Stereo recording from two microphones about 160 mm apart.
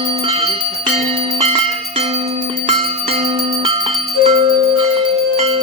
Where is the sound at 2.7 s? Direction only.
40° right (ahead or behind).